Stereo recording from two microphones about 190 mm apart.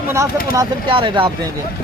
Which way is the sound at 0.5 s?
25° right (ahead or behind).